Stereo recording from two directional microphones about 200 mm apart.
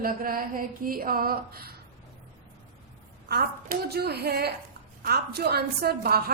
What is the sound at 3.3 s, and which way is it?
A woman's voice, 55° right (ahead or behind).